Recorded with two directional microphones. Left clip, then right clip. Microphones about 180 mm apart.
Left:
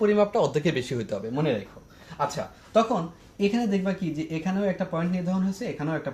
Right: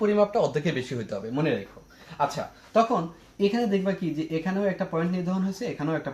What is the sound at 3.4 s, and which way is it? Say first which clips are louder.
Speech: right 1 dB; 20° left (ahead or behind).